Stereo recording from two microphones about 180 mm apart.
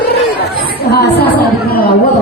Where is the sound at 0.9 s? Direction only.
65° left (ahead or behind).